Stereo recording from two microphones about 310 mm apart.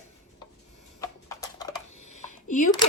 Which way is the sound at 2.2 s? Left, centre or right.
Left.